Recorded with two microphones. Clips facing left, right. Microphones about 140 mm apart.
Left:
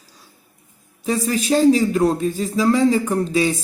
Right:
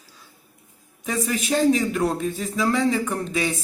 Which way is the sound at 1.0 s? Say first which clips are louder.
Left 5 dB; 30° left (ahead or behind).